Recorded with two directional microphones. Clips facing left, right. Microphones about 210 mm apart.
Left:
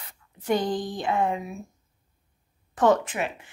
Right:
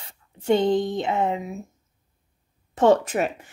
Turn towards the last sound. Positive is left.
turn(degrees=-40)  # may be behind; listen again after turning